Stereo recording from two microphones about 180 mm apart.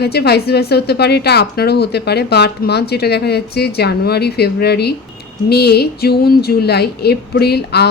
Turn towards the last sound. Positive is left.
turn(degrees=65)  # may be behind; listen again after turning